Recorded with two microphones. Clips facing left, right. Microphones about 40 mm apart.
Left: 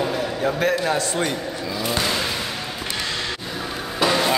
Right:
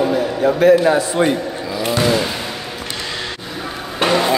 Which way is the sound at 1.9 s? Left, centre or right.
Centre.